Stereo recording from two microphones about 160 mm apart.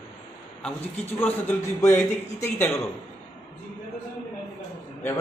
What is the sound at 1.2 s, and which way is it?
A man's voice, 15° left (ahead or behind).